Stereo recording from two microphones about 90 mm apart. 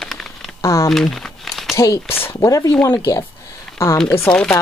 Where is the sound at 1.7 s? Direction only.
35° left (ahead or behind).